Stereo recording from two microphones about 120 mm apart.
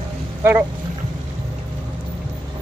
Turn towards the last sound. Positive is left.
turn(degrees=-20)  # may be behind; listen again after turning